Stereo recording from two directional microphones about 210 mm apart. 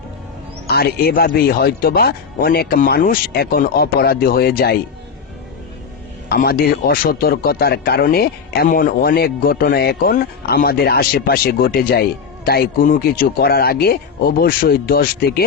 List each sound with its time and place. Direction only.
0.7 s a man's voice: 50° left (ahead or behind)
6.2 s a man's voice: 45° left (ahead or behind)